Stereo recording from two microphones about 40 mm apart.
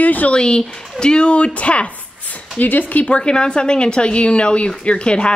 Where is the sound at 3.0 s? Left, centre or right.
Left.